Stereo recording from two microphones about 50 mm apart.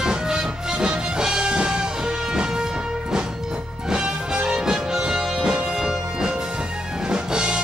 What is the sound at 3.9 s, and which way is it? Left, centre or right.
Music, centre.